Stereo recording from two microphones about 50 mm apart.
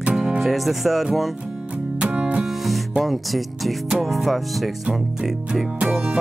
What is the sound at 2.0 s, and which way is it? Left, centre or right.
Music, right.